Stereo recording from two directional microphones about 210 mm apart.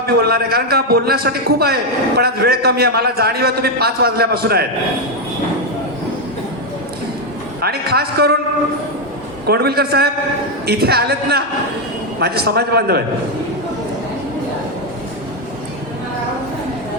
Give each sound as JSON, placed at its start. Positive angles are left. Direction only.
{"t": 0.2, "sound": "a man's voice", "side_deg": -50}
{"t": 7.6, "sound": "a man's voice", "side_deg": -50}
{"t": 9.5, "sound": "a man's voice", "side_deg": -50}